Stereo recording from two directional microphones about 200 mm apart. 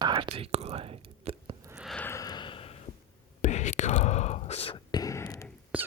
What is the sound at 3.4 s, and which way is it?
Whispering, 35° left (ahead or behind).